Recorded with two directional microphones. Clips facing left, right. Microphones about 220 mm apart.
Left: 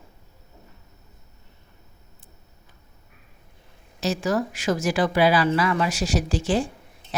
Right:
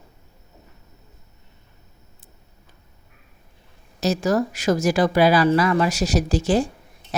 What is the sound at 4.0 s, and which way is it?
Speech, 40° right (ahead or behind).